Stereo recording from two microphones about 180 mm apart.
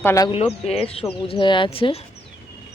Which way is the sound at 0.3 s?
35° left (ahead or behind).